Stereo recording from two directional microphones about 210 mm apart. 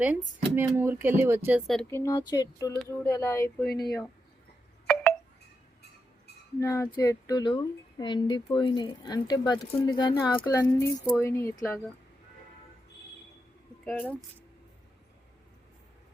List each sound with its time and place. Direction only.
0.0 s speech: 5° right (ahead or behind); by 3.7 s 10° left (ahead or behind)
3.7 s speech: 50° left (ahead or behind)
6.6 s speech: 15° left (ahead or behind)
13.8 s speech: 5° left (ahead or behind)